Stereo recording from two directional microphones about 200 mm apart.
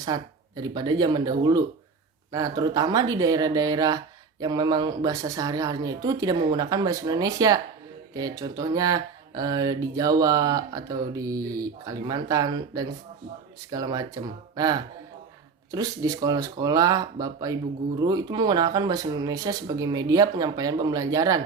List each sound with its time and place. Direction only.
0.0 s speech: 20° right (ahead or behind)